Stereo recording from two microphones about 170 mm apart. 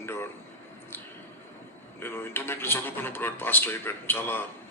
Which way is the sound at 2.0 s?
15° left (ahead or behind).